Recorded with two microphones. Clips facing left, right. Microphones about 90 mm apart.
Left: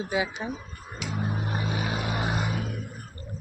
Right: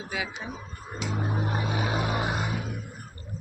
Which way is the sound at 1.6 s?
15° right (ahead or behind).